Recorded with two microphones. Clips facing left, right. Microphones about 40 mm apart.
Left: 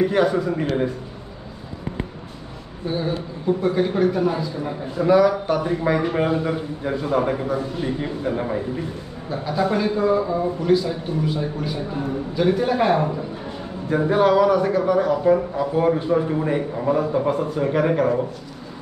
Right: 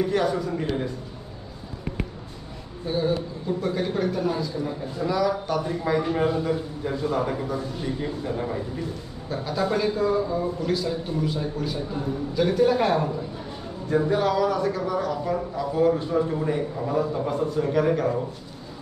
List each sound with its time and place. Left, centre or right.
0.0 s speech: left
2.9 s speech: centre; by 8.8 s left
9.3 s a man's voice: centre